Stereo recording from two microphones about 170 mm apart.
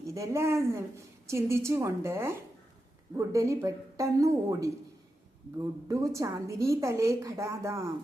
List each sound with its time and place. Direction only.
0.0 s a woman's voice: 20° right (ahead or behind)
5.9 s a woman's voice: 20° right (ahead or behind)